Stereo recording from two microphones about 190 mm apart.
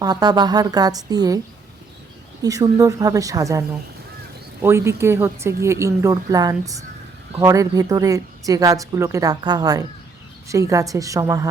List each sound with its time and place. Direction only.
0.0 s speech: 20° right (ahead or behind)
2.4 s a woman's voice: 20° right (ahead or behind)
4.6 s a woman's voice: 15° right (ahead or behind)